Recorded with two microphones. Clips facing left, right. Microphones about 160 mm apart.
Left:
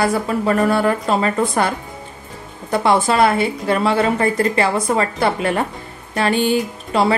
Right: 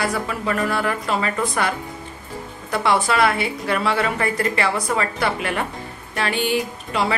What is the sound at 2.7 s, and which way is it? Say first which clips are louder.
A woman's voice: left 4 dB; 30° left (ahead or behind).